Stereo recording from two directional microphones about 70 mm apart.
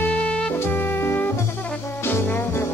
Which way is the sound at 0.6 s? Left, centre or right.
Left.